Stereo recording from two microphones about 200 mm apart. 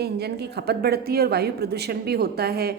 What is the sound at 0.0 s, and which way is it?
A woman's voice, 55° right (ahead or behind).